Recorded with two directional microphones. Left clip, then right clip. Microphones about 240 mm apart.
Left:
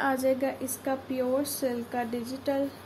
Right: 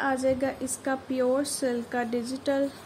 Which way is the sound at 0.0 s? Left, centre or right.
Centre.